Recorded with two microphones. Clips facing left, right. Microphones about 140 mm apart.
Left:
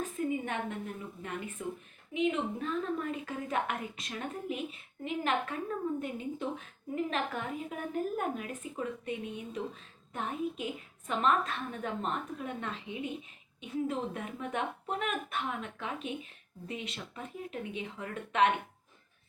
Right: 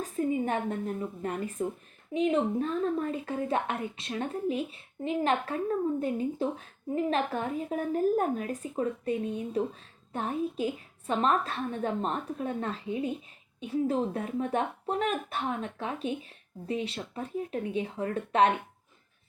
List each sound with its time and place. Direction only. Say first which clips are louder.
0.0 s a woman's voice: right 4 dB; 35° right (ahead or behind)